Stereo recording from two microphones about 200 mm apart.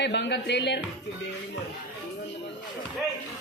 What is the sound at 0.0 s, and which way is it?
Speech, 60° left (ahead or behind).